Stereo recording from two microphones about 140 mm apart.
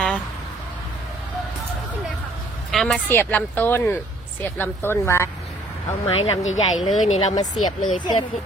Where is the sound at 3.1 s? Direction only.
15° left (ahead or behind).